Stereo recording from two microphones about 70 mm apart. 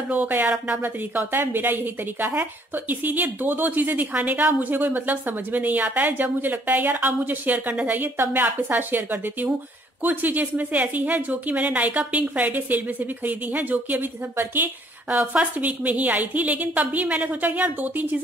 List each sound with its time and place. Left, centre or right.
0.1 s a woman's voice: right